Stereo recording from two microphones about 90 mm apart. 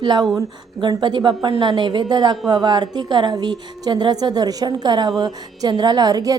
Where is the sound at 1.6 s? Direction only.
55° right (ahead or behind).